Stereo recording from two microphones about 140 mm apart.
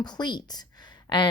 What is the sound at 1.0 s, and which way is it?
Gasp, 30° left (ahead or behind).